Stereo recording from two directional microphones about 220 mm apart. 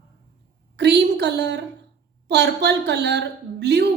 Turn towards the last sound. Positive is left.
turn(degrees=-50)  # may be behind; listen again after turning